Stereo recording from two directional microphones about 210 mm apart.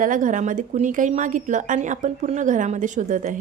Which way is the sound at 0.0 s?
40° right (ahead or behind).